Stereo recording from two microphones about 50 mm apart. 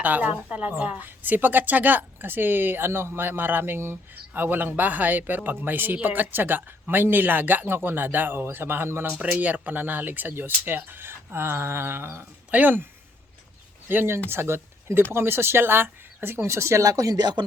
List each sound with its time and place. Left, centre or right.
0.0 s a woman's voice: right
4.1 s a man's voice: right
9.2 s speech: right
12.5 s speech: right
13.8 s speech: right